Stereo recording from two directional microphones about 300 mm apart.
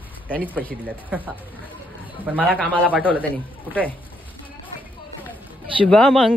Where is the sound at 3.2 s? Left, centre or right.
Centre.